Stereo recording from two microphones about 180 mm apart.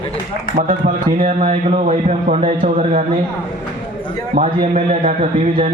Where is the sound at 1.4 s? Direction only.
35° right (ahead or behind).